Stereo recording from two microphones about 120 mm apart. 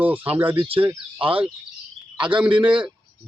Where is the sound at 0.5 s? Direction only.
50° right (ahead or behind).